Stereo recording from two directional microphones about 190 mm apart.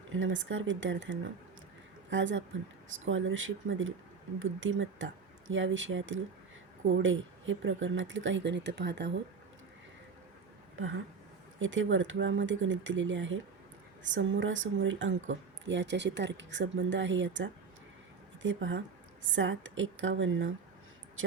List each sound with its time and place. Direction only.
0.1 s speech: 90° right
3.0 s speech: 90° right; by 9.2 s 65° right (ahead or behind)
10.8 s speech: 90° right